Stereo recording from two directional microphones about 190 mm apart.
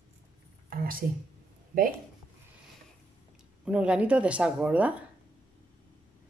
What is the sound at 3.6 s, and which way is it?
Speech, 5° right (ahead or behind).